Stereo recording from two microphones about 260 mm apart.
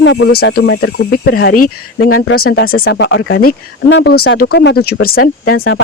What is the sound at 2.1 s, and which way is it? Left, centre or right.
Speech, left.